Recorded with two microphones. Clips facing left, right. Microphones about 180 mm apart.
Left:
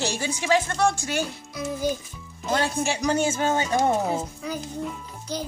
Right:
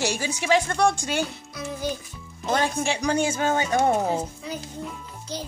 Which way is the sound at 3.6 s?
15° right (ahead or behind).